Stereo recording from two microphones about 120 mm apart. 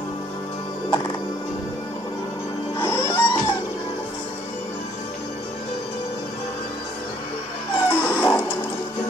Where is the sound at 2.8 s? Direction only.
20° left (ahead or behind).